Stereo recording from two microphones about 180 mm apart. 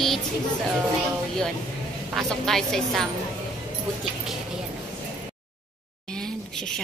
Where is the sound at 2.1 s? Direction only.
Centre (ahead or behind).